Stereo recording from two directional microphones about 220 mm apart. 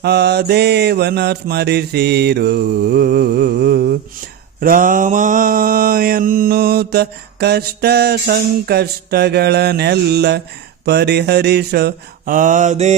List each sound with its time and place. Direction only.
0.0 s mantra: 50° right (ahead or behind); by 12.9 s 30° right (ahead or behind)